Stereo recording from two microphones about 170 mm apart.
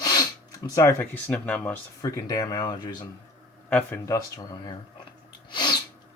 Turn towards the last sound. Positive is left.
turn(degrees=25)  # may be behind; listen again after turning